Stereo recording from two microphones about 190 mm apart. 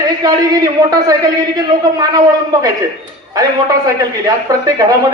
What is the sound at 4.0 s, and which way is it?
Speech, 20° right (ahead or behind).